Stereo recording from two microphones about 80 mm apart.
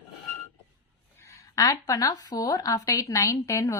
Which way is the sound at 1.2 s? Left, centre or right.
Left.